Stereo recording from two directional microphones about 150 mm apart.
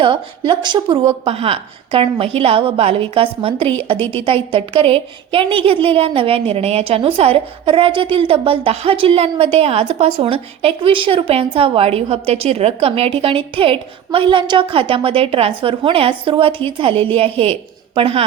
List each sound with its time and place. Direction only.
0.0 s a woman's voice: 30° right (ahead or behind)